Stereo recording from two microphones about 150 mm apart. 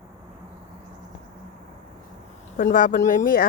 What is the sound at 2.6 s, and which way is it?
Speech, 60° left (ahead or behind).